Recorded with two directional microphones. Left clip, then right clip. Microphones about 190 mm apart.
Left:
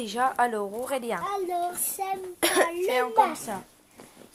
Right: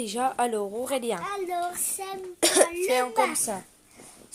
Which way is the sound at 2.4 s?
30° right (ahead or behind).